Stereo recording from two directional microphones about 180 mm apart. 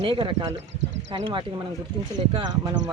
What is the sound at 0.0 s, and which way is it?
Speech, 30° right (ahead or behind).